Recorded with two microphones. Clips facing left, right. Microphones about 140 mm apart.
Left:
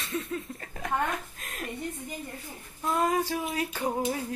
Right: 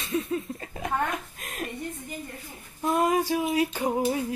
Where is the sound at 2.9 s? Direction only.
20° right (ahead or behind).